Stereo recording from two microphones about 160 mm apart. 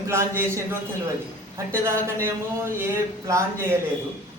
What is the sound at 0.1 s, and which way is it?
Speech, 15° right (ahead or behind).